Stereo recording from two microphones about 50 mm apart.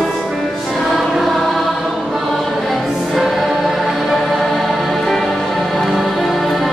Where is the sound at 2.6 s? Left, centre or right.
Centre.